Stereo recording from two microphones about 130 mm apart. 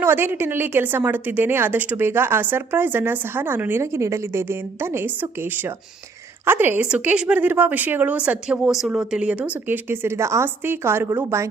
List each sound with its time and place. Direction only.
0.0 s a woman's voice: 15° right (ahead or behind)